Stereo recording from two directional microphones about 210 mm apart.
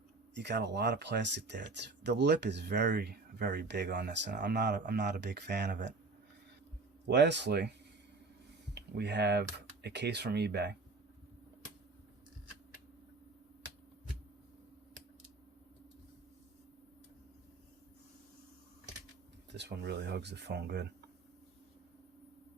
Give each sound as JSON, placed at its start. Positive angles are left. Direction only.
{"t": 0.3, "sound": "speech", "side_deg": -55}
{"t": 7.1, "sound": "speech", "side_deg": -55}
{"t": 8.7, "sound": "speech", "side_deg": -55}
{"t": 19.5, "sound": "speech", "side_deg": -55}